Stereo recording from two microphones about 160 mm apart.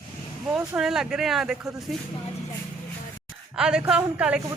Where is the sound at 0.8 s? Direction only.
5° right (ahead or behind).